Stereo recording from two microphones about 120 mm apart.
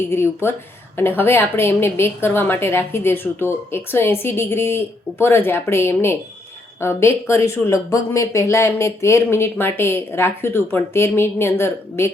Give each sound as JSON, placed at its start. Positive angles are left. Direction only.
{"t": 0.1, "sound": "speech", "side_deg": 20}